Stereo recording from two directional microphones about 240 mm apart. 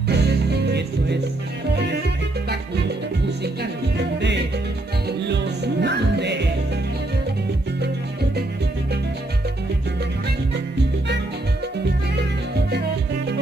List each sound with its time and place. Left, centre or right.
0.1 s music: right
5.2 s music: right
7.8 s music: right